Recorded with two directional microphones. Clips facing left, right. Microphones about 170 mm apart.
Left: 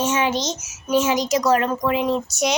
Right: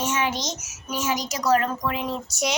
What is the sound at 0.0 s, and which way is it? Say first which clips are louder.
A child's voice: left 5 dB; 25° left (ahead or behind).